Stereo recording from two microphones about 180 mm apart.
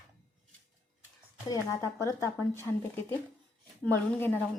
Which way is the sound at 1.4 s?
20° left (ahead or behind).